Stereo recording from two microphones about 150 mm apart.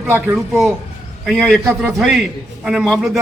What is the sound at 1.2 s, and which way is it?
Speech, centre (ahead or behind).